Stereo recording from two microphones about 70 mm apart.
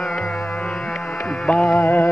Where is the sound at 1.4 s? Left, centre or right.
Centre.